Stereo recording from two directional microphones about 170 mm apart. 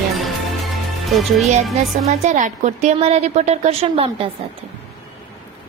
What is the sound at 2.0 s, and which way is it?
Speech, 45° right (ahead or behind).